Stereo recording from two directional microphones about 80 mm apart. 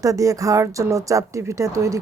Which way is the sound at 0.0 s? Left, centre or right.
Right.